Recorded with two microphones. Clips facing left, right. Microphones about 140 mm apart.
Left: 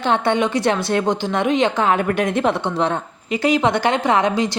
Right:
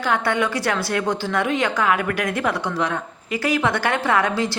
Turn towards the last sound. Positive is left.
turn(degrees=20)  # may be behind; listen again after turning